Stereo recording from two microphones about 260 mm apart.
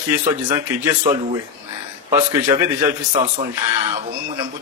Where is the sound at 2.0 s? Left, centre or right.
Centre.